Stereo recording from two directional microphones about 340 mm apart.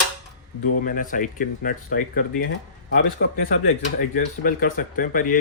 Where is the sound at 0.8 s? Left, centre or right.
Left.